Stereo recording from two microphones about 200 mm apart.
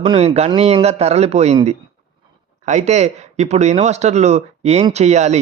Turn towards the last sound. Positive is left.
turn(degrees=-35)  # may be behind; listen again after turning